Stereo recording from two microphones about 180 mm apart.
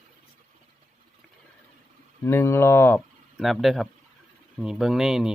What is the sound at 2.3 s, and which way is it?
Speech, 15° left (ahead or behind).